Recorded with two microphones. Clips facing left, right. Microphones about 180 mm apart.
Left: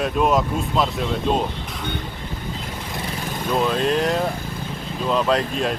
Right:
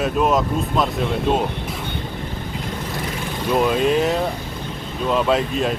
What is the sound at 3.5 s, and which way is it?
Speech, 5° right (ahead or behind).